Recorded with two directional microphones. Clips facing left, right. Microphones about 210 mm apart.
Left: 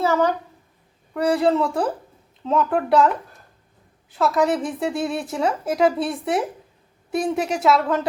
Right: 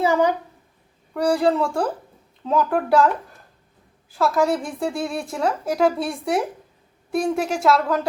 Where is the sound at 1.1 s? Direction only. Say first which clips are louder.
Even; centre (ahead or behind).